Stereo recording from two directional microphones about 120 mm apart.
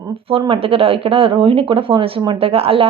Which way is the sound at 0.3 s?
50° right (ahead or behind).